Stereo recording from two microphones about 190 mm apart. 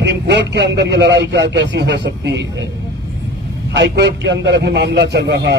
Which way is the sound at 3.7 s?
65° right (ahead or behind).